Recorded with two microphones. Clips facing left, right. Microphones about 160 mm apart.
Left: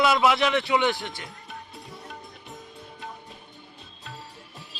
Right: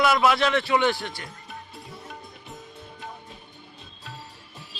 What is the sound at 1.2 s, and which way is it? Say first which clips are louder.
Music: even; centre (ahead or behind).